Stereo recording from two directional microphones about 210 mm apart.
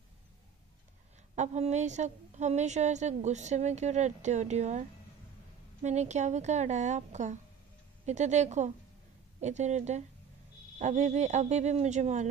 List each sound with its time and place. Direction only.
1.3 s a woman's voice: 35° right (ahead or behind)